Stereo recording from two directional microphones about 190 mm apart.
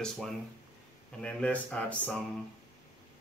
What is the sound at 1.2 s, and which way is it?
Speech, 5° left (ahead or behind).